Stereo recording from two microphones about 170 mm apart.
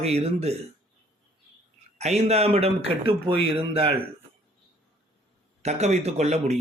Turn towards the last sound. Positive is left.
turn(degrees=-40)  # may be behind; listen again after turning